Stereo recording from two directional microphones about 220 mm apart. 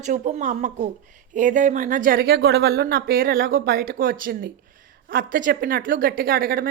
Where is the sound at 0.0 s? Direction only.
30° right (ahead or behind).